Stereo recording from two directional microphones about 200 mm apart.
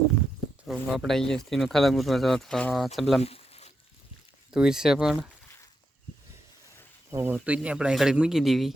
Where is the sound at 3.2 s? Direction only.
30° left (ahead or behind).